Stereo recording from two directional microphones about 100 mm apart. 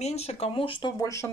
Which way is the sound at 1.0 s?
30° left (ahead or behind).